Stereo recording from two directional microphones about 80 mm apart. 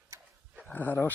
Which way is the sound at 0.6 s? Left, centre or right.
Left.